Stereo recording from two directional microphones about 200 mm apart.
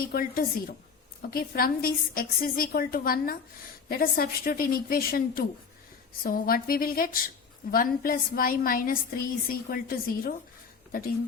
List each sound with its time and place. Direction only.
0.0 s a woman's voice: 45° left (ahead or behind)